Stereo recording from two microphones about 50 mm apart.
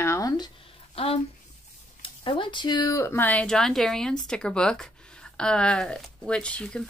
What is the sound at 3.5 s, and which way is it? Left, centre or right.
Speech, centre.